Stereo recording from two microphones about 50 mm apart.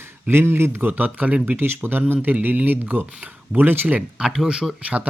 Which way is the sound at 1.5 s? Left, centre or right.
Right.